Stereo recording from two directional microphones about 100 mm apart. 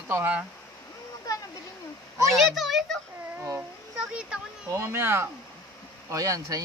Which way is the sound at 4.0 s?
10° right (ahead or behind).